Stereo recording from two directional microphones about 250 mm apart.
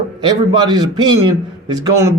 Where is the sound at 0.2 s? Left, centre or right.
Centre.